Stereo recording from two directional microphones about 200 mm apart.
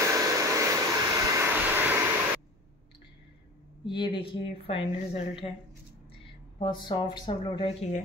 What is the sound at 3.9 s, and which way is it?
Speech, 25° left (ahead or behind).